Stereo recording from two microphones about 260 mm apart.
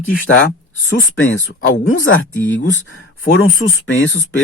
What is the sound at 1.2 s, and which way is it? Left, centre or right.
Speech, left.